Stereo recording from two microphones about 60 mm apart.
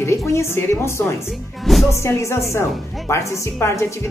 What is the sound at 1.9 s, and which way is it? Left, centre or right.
Speech, left.